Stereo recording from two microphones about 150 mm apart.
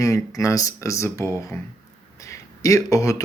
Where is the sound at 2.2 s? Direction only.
20° left (ahead or behind).